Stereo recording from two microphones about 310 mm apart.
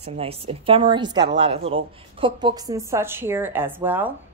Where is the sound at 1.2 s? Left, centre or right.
Right.